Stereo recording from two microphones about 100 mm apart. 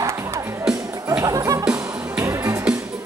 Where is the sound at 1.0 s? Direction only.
35° right (ahead or behind).